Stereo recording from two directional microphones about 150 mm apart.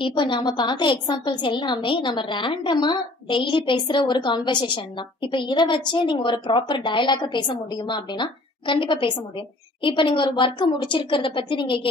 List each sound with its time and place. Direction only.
0.0 s a woman's voice: 35° left (ahead or behind)